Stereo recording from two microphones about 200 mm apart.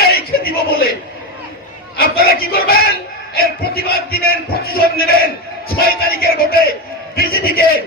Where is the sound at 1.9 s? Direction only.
50° left (ahead or behind).